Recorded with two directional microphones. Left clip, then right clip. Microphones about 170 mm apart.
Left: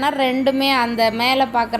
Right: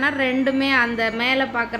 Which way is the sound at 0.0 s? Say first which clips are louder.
Left 3 dB; 15° left (ahead or behind).